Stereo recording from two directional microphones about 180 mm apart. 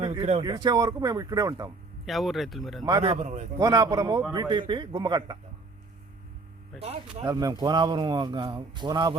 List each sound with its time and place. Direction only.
0.0 s speech: 25° right (ahead or behind)
2.0 s speech: centre (ahead or behind)
2.8 s speech: 25° right (ahead or behind)
7.3 s speech: 20° right (ahead or behind)